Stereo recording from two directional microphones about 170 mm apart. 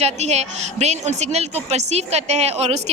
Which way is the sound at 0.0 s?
40° right (ahead or behind).